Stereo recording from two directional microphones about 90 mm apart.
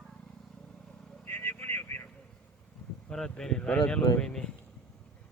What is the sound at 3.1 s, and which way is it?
Speech, 10° left (ahead or behind).